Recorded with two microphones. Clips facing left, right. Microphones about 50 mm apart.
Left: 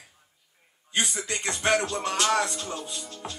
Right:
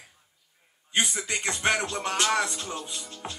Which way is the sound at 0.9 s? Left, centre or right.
Right.